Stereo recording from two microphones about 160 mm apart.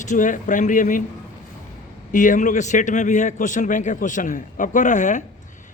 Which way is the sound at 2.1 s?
55° left (ahead or behind).